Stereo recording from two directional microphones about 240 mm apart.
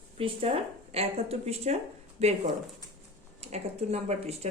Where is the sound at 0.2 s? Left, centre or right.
Right.